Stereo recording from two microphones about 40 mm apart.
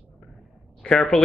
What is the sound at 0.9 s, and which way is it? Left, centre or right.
Speech, centre.